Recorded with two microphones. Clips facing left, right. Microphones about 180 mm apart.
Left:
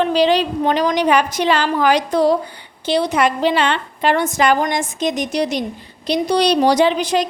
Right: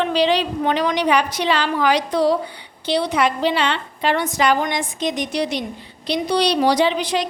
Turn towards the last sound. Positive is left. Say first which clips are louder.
# left 3 dB
turn(degrees=45)  # may be behind; listen again after turning